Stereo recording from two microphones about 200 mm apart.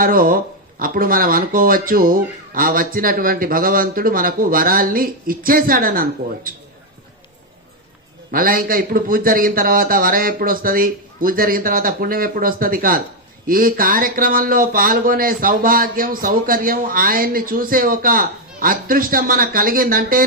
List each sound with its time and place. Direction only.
0.0 s speech: 45° right (ahead or behind)
8.3 s speech: 45° right (ahead or behind)